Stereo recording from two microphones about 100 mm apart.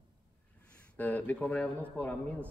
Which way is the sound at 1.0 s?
15° left (ahead or behind).